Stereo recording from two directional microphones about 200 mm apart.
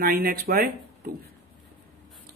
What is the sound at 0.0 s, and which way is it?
Speech, 45° right (ahead or behind).